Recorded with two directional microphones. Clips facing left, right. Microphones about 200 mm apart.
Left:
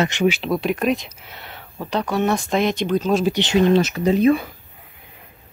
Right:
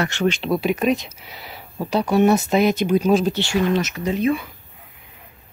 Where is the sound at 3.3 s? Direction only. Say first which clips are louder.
Left 4 dB; 20° left (ahead or behind); by 4.5 s 40° left (ahead or behind).